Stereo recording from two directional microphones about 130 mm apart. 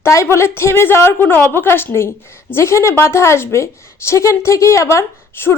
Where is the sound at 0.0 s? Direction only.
20° left (ahead or behind).